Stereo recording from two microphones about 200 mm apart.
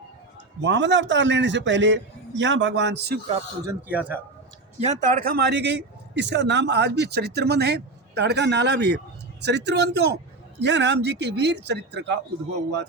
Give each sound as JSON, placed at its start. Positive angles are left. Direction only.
{"t": 0.6, "sound": "speech", "side_deg": -65}
{"t": 3.7, "sound": "a man's voice", "side_deg": -10}
{"t": 4.8, "sound": "speech", "side_deg": -35}